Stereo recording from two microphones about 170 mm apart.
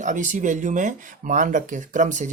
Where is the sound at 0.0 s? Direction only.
45° right (ahead or behind).